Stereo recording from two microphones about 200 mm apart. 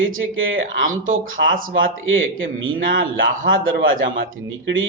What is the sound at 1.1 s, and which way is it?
Speech, 45° right (ahead or behind).